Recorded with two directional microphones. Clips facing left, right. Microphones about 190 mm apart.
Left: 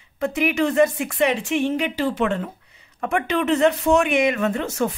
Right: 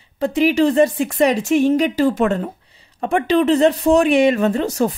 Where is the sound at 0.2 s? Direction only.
30° right (ahead or behind).